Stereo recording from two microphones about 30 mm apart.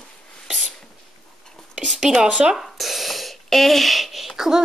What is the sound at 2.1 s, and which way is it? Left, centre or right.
Speech, right.